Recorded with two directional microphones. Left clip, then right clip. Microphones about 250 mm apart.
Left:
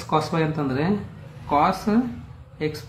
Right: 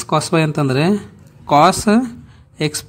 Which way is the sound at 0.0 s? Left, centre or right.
Right.